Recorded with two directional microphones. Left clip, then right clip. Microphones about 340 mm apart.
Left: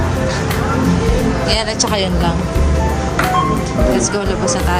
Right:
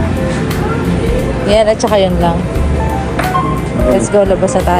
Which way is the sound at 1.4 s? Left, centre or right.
Centre.